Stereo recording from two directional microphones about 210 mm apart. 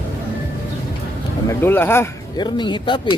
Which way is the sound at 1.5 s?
10° left (ahead or behind).